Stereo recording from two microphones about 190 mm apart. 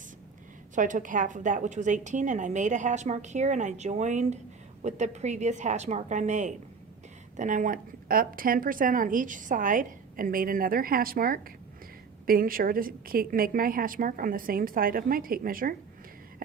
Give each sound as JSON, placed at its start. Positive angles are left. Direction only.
{"t": 0.8, "sound": "a woman's voice", "side_deg": -45}